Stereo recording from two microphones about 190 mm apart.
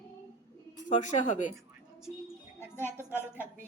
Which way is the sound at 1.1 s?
40° left (ahead or behind).